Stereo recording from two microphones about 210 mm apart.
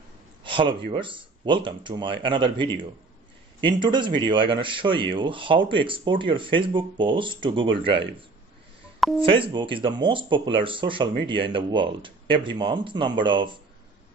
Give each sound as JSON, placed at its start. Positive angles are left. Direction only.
{"t": 0.4, "sound": "speech", "side_deg": -25}
{"t": 9.2, "sound": "speech", "side_deg": -25}